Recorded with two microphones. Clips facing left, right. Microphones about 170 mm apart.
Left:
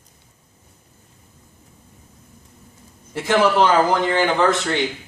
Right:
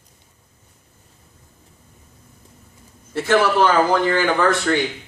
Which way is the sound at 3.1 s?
15° left (ahead or behind).